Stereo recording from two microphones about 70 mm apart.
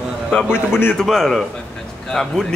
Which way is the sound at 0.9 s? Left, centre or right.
Centre.